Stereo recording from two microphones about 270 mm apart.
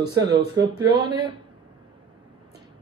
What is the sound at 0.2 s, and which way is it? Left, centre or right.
Speech, centre.